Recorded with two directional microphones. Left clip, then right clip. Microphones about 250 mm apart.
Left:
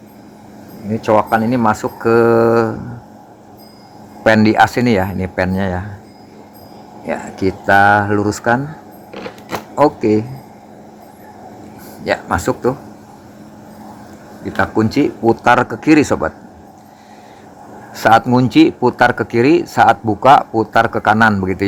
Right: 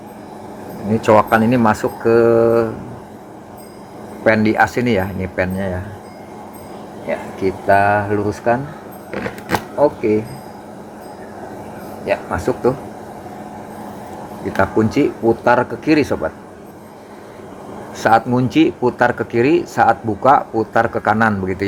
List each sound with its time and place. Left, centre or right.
1.0 s speech: centre
2.0 s speech: left
4.2 s speech: left
7.1 s speech: left
9.7 s speech: left
12.0 s speech: left
14.5 s speech: centre
17.9 s speech: centre